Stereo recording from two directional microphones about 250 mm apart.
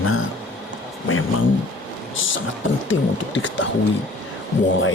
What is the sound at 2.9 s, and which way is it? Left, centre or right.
Speech, left.